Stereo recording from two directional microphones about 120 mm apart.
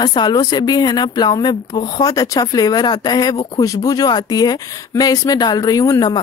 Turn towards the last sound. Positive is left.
turn(degrees=30)  # may be behind; listen again after turning